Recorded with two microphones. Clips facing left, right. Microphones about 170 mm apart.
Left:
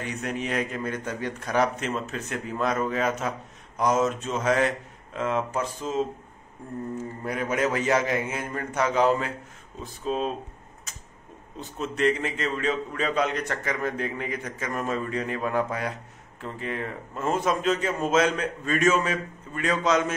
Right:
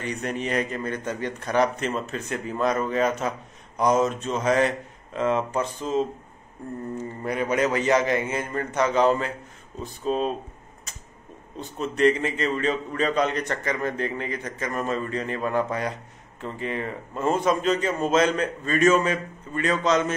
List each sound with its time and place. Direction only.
0.0 s a man's voice: 5° left (ahead or behind)
11.5 s a man's voice: centre (ahead or behind)